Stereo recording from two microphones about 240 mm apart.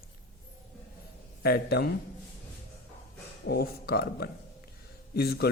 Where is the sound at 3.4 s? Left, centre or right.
Left.